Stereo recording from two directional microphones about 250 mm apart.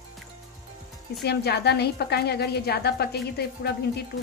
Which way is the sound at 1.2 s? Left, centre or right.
Left.